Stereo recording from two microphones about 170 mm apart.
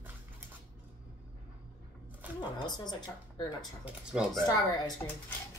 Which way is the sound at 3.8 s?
5° right (ahead or behind).